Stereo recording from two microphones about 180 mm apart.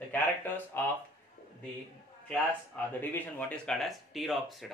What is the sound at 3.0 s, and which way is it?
A man's voice, 10° left (ahead or behind).